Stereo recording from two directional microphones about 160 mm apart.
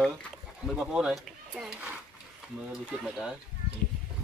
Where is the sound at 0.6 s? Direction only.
Centre (ahead or behind).